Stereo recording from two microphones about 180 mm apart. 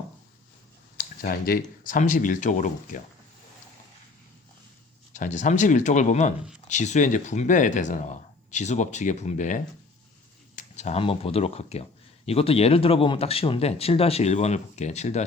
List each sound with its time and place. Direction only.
0.9 s speech: 55° left (ahead or behind)
5.1 s speech: 45° left (ahead or behind)